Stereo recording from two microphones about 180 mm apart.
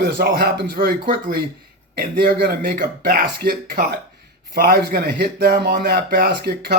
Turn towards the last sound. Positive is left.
turn(degrees=-60)  # may be behind; listen again after turning